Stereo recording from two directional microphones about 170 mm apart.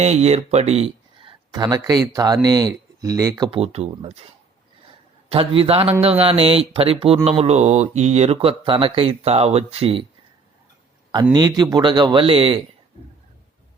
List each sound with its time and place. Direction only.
0.0 s speech: 40° right (ahead or behind); by 3.5 s 20° right (ahead or behind)
3.5 s speech: 35° right (ahead or behind)
5.3 s speech: 35° right (ahead or behind)
11.1 s a man's voice: 25° right (ahead or behind)